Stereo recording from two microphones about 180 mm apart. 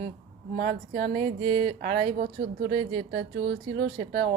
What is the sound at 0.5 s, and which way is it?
Speech, 55° right (ahead or behind).